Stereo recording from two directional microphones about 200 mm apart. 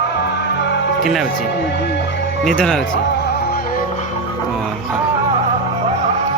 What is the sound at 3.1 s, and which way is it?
Music, 50° left (ahead or behind).